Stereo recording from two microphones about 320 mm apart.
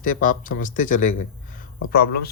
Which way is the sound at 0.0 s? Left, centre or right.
Left.